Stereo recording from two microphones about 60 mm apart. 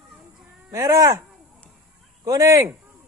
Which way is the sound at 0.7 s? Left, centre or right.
Right.